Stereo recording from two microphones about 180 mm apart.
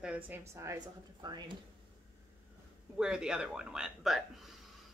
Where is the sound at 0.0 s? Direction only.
10° right (ahead or behind).